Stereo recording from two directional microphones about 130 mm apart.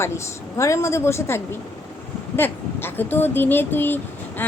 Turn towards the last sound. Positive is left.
turn(degrees=15)  # may be behind; listen again after turning